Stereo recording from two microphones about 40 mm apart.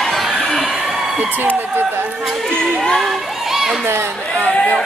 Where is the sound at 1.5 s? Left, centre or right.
Right.